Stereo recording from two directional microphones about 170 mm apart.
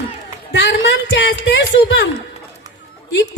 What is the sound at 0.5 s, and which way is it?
A child's voice, 90° left.